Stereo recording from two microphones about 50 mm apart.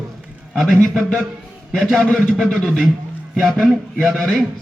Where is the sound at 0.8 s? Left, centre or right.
Centre.